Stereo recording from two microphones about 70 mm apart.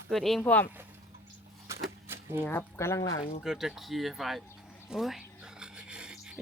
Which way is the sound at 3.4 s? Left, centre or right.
Centre.